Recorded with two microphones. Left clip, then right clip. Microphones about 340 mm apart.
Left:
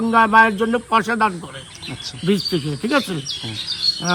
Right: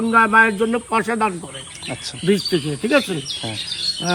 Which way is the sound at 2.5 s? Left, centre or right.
Centre.